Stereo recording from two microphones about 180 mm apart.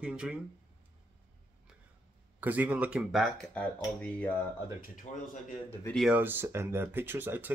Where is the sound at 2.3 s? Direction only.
10° right (ahead or behind); by 4.3 s 5° left (ahead or behind).